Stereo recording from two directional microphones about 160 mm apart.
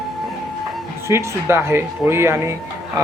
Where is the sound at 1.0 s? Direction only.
15° right (ahead or behind).